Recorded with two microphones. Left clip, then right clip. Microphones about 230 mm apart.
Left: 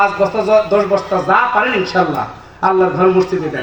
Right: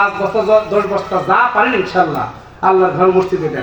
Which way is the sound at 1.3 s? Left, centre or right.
Left.